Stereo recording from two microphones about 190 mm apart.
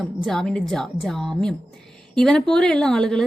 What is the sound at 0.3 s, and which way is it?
A woman's voice, 5° left (ahead or behind).